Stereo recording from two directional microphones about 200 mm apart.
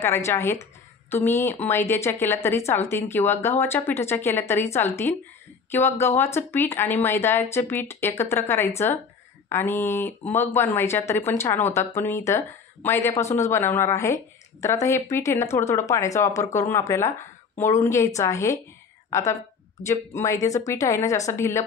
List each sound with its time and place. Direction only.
0.0 s a woman's voice: 10° left (ahead or behind)